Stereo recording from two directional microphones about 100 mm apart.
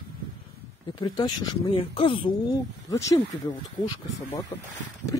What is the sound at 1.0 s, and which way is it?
Speech, 50° left (ahead or behind).